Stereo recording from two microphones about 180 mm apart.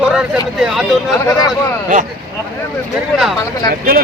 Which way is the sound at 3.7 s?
55° right (ahead or behind).